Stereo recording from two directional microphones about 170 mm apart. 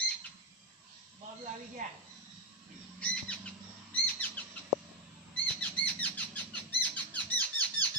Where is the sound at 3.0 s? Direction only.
5° left (ahead or behind).